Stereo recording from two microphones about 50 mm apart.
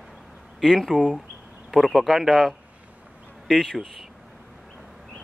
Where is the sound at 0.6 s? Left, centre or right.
Centre.